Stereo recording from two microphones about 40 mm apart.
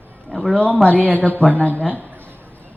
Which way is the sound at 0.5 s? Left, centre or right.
Left.